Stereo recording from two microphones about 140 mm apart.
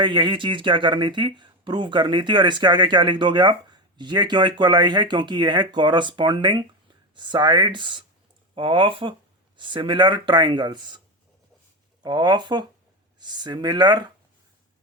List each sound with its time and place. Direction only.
0.0 s speech: 35° right (ahead or behind)
12.0 s speech: 30° right (ahead or behind)